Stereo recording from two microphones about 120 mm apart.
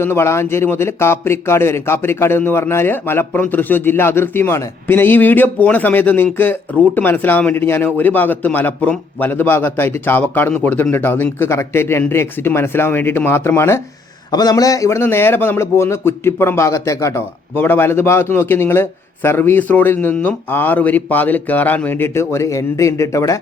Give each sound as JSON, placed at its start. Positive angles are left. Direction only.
{"t": 0.0, "sound": "a man's voice", "side_deg": 20}
{"t": 14.3, "sound": "a man's voice", "side_deg": 35}